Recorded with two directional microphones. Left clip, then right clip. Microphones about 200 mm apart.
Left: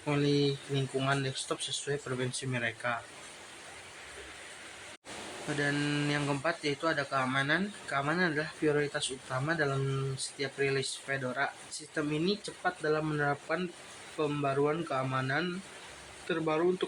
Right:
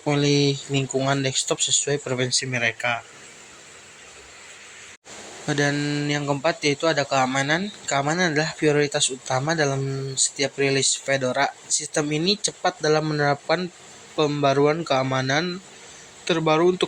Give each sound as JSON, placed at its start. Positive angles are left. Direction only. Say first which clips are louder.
{"t": 0.0, "sound": "speech", "louder": "right 9 dB", "side_deg": -30}
{"t": 5.5, "sound": "speech", "louder": "right 10 dB", "side_deg": -35}
{"t": 5.7, "sound": "speech", "louder": "right 7 dB", "side_deg": -20}